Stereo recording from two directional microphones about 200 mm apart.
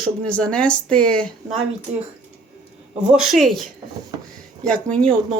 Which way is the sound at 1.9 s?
35° right (ahead or behind).